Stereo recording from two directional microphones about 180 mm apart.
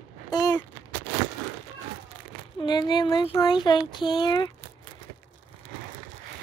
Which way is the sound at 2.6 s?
25° left (ahead or behind).